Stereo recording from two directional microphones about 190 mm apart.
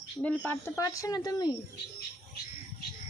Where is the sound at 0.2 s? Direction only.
10° left (ahead or behind).